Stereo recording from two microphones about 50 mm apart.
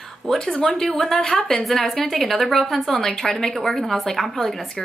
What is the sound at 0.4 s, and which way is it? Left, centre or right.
A woman's voice, centre.